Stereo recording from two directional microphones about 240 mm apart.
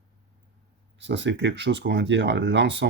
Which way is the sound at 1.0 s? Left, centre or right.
Right.